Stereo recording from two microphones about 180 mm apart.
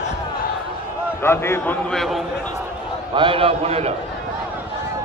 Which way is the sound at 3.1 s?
30° right (ahead or behind).